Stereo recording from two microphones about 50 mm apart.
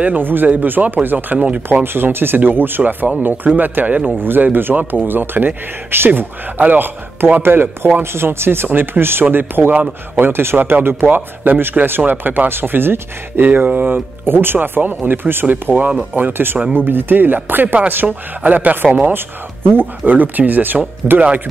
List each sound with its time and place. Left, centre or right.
0.0 s speech: right
1.7 s speech: right
4.2 s speech: right
19.1 s speech: right
20.1 s speech: right